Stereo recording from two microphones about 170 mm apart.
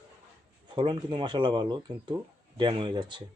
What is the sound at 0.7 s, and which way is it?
Speech, 30° right (ahead or behind).